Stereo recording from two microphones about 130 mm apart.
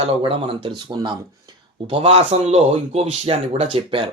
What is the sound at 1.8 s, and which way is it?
Music, 50° right (ahead or behind).